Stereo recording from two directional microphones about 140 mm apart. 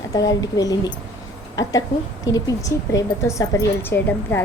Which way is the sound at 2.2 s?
25° left (ahead or behind).